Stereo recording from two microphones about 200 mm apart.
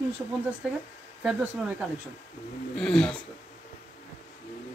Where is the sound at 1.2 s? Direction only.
5° right (ahead or behind).